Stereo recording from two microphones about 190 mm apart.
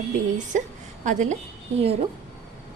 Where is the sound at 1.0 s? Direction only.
40° right (ahead or behind).